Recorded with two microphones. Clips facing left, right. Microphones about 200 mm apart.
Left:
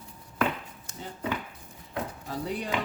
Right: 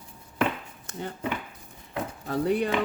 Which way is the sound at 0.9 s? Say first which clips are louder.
Right 8 dB; 60° right (ahead or behind).